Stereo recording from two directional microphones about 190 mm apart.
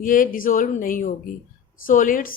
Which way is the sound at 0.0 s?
45° left (ahead or behind).